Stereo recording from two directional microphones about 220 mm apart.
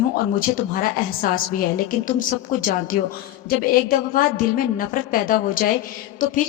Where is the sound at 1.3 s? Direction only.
40° left (ahead or behind).